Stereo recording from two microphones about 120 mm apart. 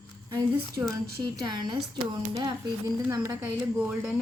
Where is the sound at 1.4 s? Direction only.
35° right (ahead or behind).